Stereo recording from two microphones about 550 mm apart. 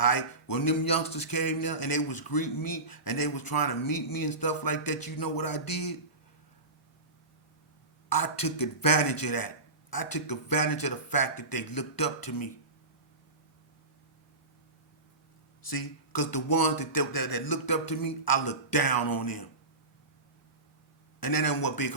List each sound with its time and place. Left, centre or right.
0.0 s speech: left
8.1 s speech: left
15.6 s speech: left
21.2 s speech: left